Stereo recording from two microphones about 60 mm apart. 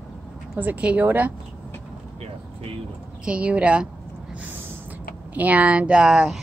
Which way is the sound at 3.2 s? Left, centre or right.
Centre.